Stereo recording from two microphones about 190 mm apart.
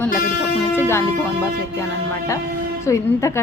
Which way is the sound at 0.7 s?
15° left (ahead or behind).